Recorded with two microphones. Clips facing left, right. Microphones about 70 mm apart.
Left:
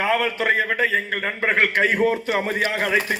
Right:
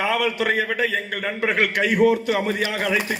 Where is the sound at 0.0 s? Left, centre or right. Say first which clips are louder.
Left 1 dB; left.